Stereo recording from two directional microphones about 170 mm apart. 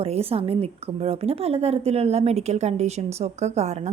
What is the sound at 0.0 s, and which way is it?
A woman's voice, 35° right (ahead or behind).